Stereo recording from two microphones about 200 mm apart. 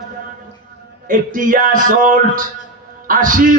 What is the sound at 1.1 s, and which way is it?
A man's voice, 40° right (ahead or behind).